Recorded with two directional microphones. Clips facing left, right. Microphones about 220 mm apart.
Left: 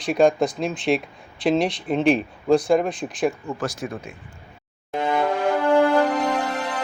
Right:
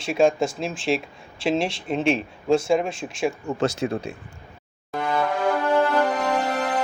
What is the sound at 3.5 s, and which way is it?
Speech, 25° right (ahead or behind).